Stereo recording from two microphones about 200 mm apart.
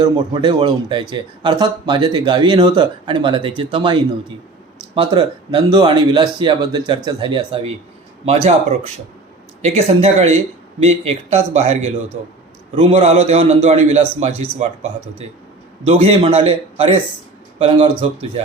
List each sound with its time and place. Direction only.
0.0 s speech: 20° right (ahead or behind)
4.9 s a man's voice: 25° right (ahead or behind)
9.6 s a man's voice: 35° right (ahead or behind)
15.9 s speech: 30° right (ahead or behind)